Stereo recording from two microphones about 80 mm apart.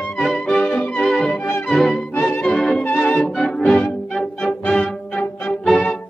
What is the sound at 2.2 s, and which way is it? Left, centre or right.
Music, left.